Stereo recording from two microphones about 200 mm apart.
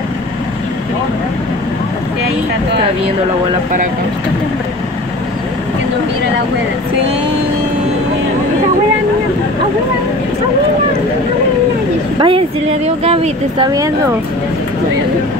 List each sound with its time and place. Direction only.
12.2 s speech: 25° right (ahead or behind)
13.7 s speech: 15° right (ahead or behind)